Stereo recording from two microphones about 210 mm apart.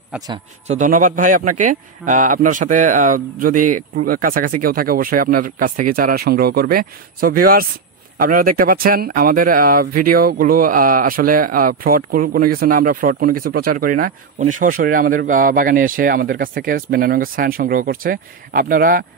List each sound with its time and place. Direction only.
0.3 s speech: 35° right (ahead or behind)